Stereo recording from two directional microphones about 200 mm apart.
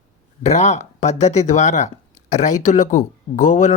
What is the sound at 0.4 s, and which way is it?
Speech, 35° left (ahead or behind).